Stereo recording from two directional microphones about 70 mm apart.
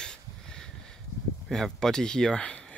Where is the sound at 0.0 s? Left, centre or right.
Centre.